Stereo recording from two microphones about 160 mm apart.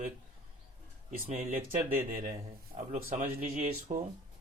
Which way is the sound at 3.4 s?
55° right (ahead or behind).